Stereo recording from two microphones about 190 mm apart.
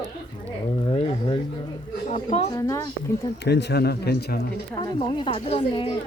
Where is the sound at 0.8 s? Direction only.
30° left (ahead or behind).